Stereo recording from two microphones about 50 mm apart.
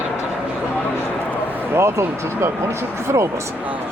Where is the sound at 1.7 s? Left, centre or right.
Right.